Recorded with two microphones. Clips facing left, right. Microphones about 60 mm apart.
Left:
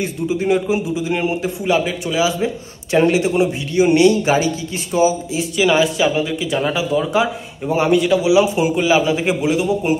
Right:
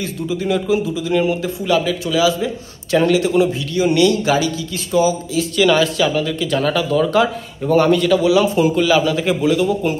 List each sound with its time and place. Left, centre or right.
0.0 s a man's voice: left